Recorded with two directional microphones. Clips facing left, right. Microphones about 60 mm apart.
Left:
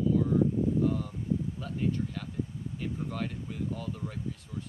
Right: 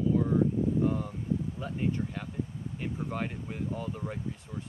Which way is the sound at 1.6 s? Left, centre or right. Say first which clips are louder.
Even; right.